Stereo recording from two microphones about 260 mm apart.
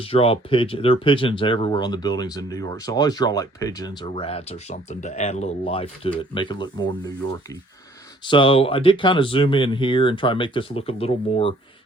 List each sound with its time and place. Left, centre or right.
0.0 s speech: left
8.2 s speech: centre